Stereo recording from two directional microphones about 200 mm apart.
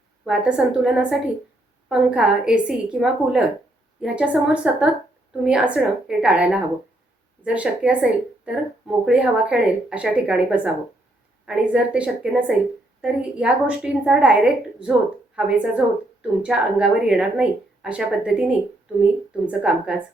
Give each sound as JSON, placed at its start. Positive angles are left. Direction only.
{"t": 0.3, "sound": "a woman's voice", "side_deg": -5}